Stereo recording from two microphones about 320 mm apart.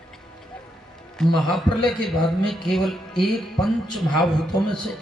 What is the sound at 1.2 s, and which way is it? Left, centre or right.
A man's voice, centre.